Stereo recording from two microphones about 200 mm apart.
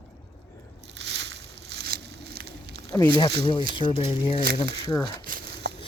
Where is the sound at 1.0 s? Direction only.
60° right (ahead or behind).